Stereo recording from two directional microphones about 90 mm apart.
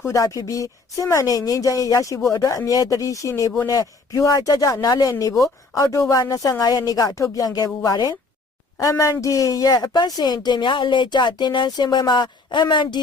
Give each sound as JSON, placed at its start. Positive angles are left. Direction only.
{"t": 0.0, "sound": "speech", "side_deg": 35}